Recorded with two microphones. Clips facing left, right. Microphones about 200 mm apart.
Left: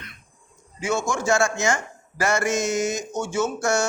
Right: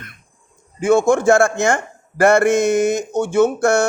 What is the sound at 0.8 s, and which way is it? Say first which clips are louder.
A man's voice: right 11 dB; 55° right (ahead or behind).